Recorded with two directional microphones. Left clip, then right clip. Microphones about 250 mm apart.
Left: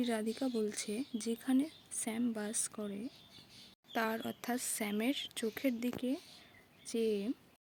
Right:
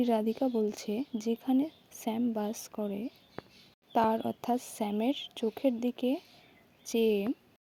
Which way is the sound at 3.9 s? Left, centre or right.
Right.